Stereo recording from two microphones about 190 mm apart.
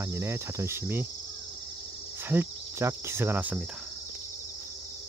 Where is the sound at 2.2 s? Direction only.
10° right (ahead or behind).